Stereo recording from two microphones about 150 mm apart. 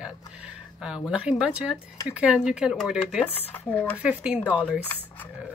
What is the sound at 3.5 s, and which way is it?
Speech, 10° left (ahead or behind).